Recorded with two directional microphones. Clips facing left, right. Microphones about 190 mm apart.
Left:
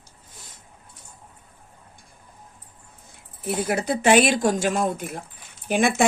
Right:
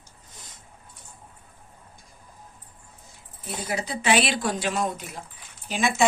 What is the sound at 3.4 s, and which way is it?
Speech, 60° left (ahead or behind).